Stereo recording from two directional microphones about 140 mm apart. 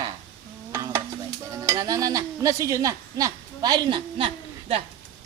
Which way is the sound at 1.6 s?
20° right (ahead or behind).